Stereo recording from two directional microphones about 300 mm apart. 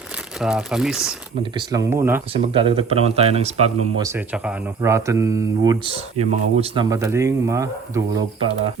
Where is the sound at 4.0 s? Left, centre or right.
Centre.